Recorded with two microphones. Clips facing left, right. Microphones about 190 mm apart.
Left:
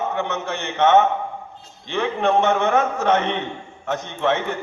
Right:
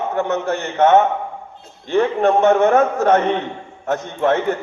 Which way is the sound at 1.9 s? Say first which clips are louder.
Right 4 dB; 40° right (ahead or behind).